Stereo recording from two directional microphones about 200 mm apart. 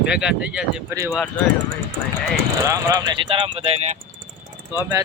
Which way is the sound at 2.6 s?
15° right (ahead or behind).